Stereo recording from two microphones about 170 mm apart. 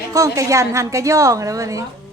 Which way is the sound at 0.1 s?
20° right (ahead or behind).